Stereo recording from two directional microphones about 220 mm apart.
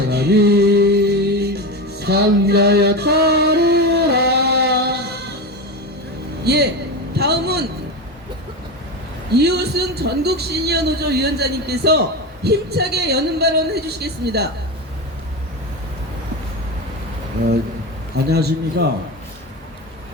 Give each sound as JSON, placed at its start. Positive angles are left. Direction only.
{"t": 0.0, "sound": "music", "side_deg": -50}
{"t": 6.4, "sound": "speech", "side_deg": -50}
{"t": 7.2, "sound": "a sound", "side_deg": -45}
{"t": 9.3, "sound": "a man's voice", "side_deg": -50}
{"t": 18.3, "sound": "a man's voice", "side_deg": -45}